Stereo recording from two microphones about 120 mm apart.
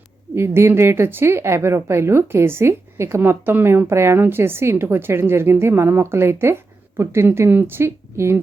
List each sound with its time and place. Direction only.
0.3 s a woman's voice: 20° right (ahead or behind)